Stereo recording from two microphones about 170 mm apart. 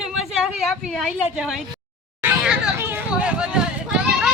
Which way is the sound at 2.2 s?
5° right (ahead or behind).